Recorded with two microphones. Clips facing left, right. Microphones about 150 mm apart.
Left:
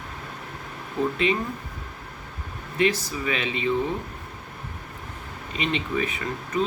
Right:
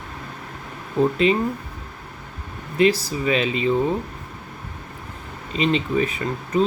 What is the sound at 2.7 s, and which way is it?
Speech, 35° right (ahead or behind).